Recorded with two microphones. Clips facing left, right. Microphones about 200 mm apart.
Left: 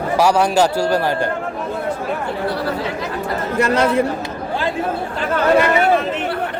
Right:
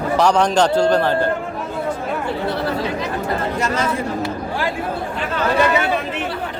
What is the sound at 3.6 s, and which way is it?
Speech, 60° left (ahead or behind).